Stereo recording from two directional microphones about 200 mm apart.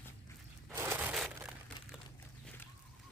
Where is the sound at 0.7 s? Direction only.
10° right (ahead or behind).